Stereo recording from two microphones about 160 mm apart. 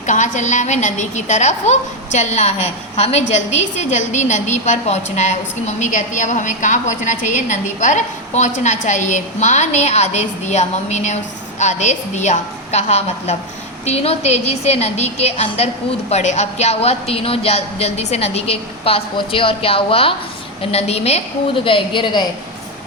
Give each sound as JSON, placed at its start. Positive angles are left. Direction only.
{"t": 0.1, "sound": "a woman's voice", "side_deg": 50}